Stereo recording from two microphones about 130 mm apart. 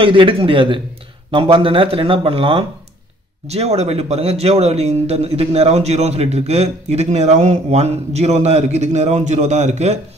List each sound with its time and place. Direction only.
0.0 s speech: 40° right (ahead or behind); by 9.9 s 60° right (ahead or behind)